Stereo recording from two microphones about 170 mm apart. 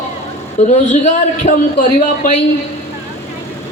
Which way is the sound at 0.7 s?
40° left (ahead or behind).